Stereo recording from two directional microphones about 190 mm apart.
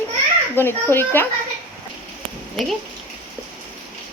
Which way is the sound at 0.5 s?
10° left (ahead or behind).